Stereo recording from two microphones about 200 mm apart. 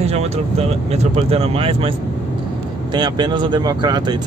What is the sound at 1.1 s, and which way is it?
Speech, 30° right (ahead or behind).